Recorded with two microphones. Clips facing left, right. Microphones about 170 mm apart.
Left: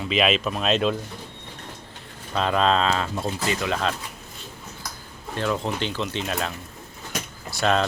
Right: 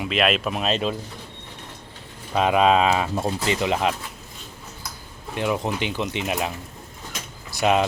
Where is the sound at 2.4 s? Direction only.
10° right (ahead or behind).